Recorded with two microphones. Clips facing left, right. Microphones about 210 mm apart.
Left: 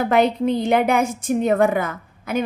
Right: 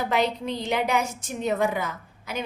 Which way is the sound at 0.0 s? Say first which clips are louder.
Left 8 dB; 55° left (ahead or behind).